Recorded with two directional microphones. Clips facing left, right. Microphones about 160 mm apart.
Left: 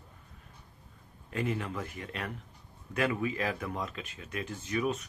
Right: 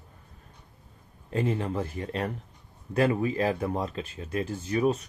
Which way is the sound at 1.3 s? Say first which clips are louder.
Right 6 dB; 30° right (ahead or behind).